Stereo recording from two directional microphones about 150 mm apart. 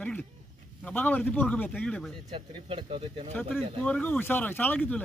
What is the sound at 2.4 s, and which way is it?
Speech, 35° right (ahead or behind).